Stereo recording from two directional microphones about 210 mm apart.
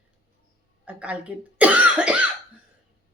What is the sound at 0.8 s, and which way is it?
Cough, 5° right (ahead or behind).